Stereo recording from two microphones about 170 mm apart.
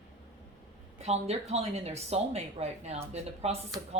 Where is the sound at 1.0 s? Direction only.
40° right (ahead or behind).